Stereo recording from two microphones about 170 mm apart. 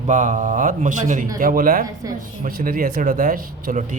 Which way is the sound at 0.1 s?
50° right (ahead or behind).